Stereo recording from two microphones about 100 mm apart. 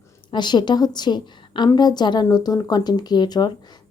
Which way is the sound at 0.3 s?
50° left (ahead or behind).